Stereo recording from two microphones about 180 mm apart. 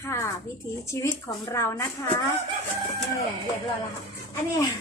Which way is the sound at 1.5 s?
15° left (ahead or behind).